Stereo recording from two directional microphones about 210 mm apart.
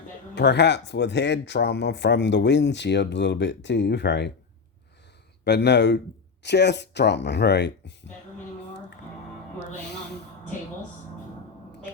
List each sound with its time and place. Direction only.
0.3 s speech: 55° left (ahead or behind)
5.5 s speech: 55° left (ahead or behind)